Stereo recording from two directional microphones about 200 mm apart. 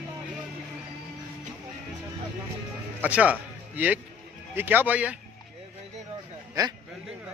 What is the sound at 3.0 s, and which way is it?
Speech, 5° right (ahead or behind).